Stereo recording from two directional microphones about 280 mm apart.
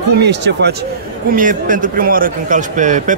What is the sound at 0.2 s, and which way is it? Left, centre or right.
A man's voice, right.